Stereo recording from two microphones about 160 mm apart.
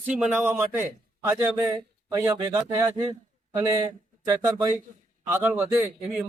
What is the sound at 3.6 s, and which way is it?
Speech, 20° right (ahead or behind).